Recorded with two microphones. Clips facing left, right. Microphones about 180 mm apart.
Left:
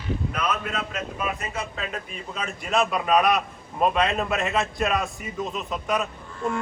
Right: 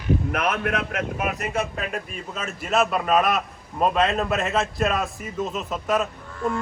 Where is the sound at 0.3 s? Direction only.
60° right (ahead or behind).